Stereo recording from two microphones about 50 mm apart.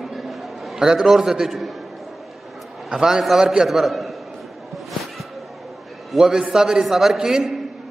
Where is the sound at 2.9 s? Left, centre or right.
Centre.